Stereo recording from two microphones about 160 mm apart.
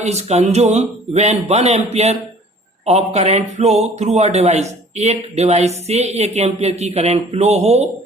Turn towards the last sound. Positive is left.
turn(degrees=-40)  # may be behind; listen again after turning